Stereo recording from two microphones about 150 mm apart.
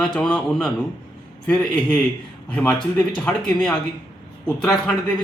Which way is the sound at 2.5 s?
5° left (ahead or behind).